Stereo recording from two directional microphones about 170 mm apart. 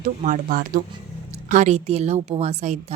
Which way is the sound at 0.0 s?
50° right (ahead or behind).